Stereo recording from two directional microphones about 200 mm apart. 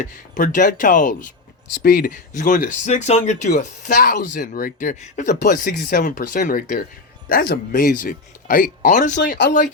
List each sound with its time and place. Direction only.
0.0 s speech: 40° left (ahead or behind)
9.1 s speech: 50° left (ahead or behind)